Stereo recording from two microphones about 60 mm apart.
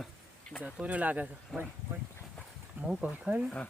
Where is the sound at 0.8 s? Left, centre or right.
Right.